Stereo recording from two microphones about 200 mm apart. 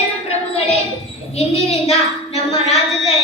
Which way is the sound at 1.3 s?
30° left (ahead or behind).